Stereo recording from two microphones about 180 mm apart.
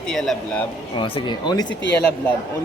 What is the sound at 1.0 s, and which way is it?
Speech, 30° left (ahead or behind).